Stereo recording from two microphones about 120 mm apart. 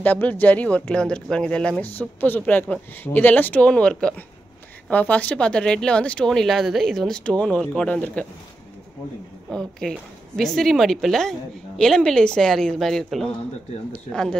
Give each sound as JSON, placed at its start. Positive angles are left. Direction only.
{"t": 0.0, "sound": "speech", "side_deg": 15}
{"t": 9.5, "sound": "a woman's voice", "side_deg": 5}